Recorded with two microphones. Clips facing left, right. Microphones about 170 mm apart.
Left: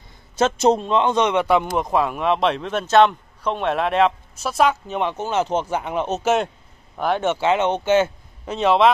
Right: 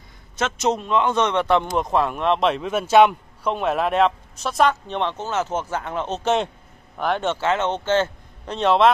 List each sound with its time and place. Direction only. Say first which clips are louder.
0.4 s a man's voice: left 5 dB; 30° left (ahead or behind)
1.1 s a man's voice: left 1 dB; 10° left (ahead or behind)